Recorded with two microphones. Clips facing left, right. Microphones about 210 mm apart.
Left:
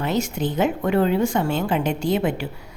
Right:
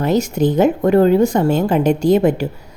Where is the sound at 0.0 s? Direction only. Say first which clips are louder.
Right 7 dB; 40° right (ahead or behind).